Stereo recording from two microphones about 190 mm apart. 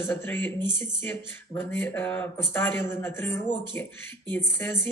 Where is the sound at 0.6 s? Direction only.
20° right (ahead or behind).